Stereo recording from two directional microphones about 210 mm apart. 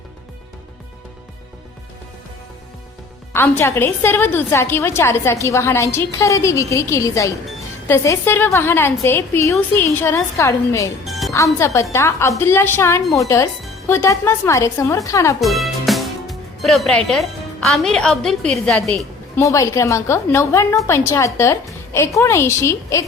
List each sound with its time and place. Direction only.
3.3 s a woman's voice: 10° left (ahead or behind)
11.0 s music: centre (ahead or behind)
11.6 s a woman's voice: 15° left (ahead or behind)
15.4 s a woman's voice: centre (ahead or behind)
19.4 s a woman's voice: 15° left (ahead or behind)